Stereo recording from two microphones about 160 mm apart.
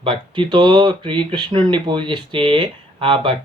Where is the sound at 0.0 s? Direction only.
30° right (ahead or behind).